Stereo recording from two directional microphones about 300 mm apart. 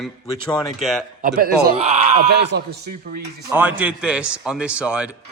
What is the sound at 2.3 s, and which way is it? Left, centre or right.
Speech, right.